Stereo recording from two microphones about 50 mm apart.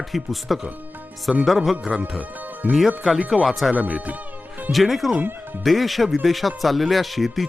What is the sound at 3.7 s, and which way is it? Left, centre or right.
Speech, right.